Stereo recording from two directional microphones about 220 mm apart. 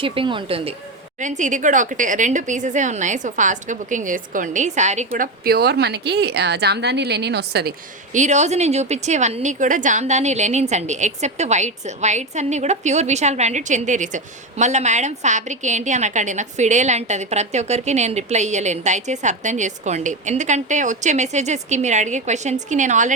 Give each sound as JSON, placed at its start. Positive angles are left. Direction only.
{"t": 0.0, "sound": "a woman's voice", "side_deg": -25}
{"t": 8.1, "sound": "a woman's voice", "side_deg": -35}